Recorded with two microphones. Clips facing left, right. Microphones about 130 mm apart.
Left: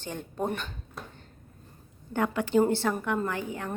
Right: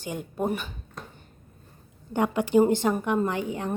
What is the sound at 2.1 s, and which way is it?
A woman's voice, 15° right (ahead or behind).